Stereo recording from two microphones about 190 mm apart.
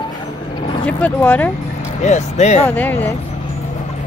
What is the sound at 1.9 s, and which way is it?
Speech, 35° left (ahead or behind).